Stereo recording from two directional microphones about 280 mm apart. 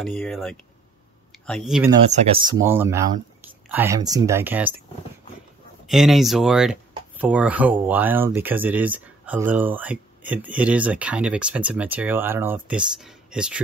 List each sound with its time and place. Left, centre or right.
0.0 s speech: centre
1.9 s speech: right
2.6 s speech: centre
5.9 s speech: centre